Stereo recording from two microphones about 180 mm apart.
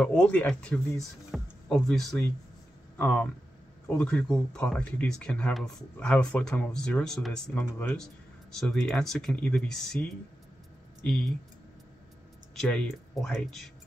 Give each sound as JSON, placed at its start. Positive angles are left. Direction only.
{"t": 0.0, "sound": "speech", "side_deg": 5}
{"t": 12.5, "sound": "speech", "side_deg": 5}